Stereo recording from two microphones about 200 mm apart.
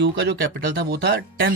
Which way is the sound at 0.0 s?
55° right (ahead or behind).